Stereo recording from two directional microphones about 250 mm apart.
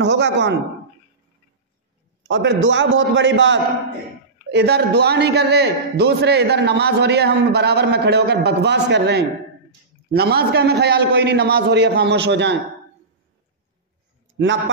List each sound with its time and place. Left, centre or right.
0.0 s a man's voice: right
2.2 s a man's voice: right